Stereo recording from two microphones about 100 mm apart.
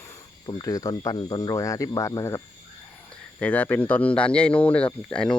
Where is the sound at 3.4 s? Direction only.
15° left (ahead or behind).